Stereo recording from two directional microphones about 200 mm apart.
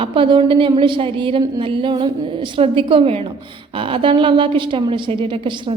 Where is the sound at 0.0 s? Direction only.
25° right (ahead or behind).